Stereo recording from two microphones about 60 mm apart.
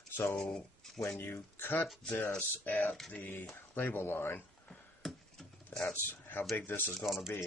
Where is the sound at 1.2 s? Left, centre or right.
Left.